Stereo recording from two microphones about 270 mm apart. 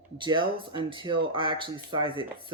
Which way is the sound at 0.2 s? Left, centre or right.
Centre.